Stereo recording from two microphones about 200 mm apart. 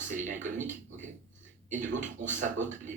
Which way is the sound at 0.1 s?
40° right (ahead or behind).